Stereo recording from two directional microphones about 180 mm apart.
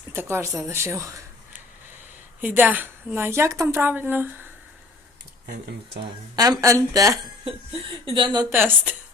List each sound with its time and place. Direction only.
0.1 s a woman's voice: 15° right (ahead or behind)
2.4 s a woman's voice: 10° right (ahead or behind)
5.5 s speech: 70° right (ahead or behind)
6.0 s speech: 20° right (ahead or behind)
7.4 s speech: 30° right (ahead or behind)
8.5 s a woman's voice: 10° right (ahead or behind)